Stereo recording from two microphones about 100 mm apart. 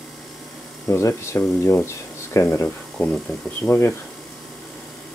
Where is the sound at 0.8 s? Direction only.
30° left (ahead or behind).